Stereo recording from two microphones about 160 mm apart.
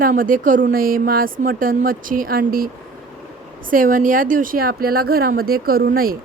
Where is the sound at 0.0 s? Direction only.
60° right (ahead or behind).